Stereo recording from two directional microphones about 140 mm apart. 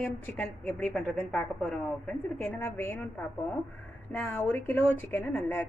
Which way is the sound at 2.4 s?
15° left (ahead or behind).